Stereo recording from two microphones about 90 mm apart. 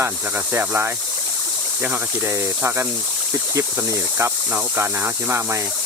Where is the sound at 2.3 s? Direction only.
30° right (ahead or behind).